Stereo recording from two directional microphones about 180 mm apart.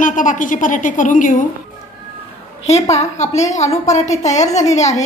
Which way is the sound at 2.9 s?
35° left (ahead or behind).